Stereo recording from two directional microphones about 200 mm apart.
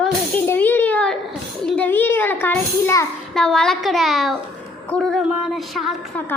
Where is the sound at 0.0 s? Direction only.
10° left (ahead or behind).